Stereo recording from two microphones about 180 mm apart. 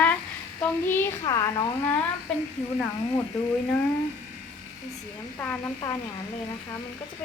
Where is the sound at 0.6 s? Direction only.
10° left (ahead or behind).